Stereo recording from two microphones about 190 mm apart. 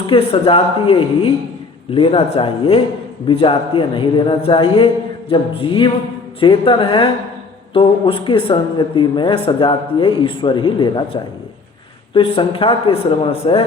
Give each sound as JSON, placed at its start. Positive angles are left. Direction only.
{"t": 0.1, "sound": "speech", "side_deg": 30}